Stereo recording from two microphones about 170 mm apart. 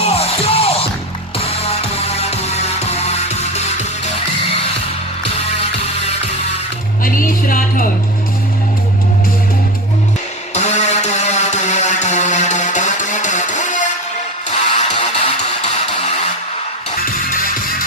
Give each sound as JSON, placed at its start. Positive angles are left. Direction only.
{"t": 0.0, "sound": "music", "side_deg": 35}
{"t": 7.0, "sound": "music", "side_deg": 55}
{"t": 10.5, "sound": "a sound", "side_deg": 40}
{"t": 14.5, "sound": "music", "side_deg": 40}
{"t": 17.0, "sound": "music", "side_deg": 55}